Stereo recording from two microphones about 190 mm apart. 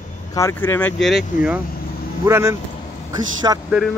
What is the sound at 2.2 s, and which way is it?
Speech, 15° right (ahead or behind).